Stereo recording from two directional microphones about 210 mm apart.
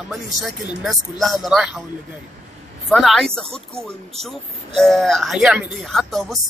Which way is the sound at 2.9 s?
Centre (ahead or behind).